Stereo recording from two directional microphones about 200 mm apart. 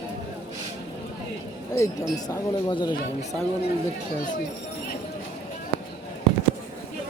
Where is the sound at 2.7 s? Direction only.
20° left (ahead or behind).